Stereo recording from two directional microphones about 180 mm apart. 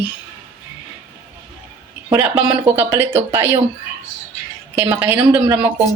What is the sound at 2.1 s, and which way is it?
Speech, 10° right (ahead or behind).